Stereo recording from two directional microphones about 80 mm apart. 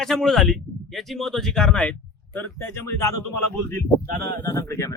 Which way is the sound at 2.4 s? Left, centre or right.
Left.